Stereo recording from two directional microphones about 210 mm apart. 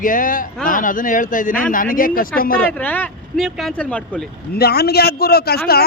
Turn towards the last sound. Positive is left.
turn(degrees=45)  # may be behind; listen again after turning